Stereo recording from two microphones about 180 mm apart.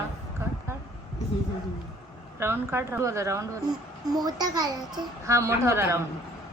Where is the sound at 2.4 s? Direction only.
15° right (ahead or behind).